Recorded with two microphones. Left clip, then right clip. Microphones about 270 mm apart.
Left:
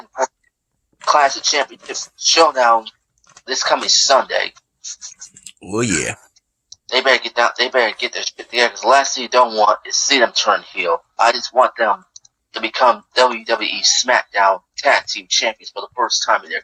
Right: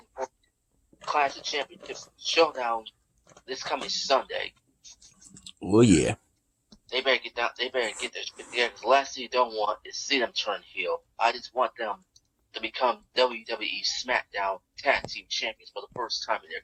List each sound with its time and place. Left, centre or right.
1.0 s speech: left
4.9 s a sound: centre
5.7 s speech: centre
6.7 s speech: left